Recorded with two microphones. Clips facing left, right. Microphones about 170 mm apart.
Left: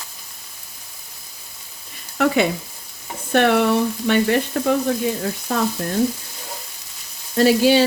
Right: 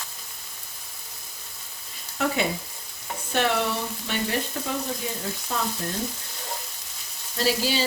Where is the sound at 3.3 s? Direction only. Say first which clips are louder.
Left 9 dB; 60° left (ahead or behind).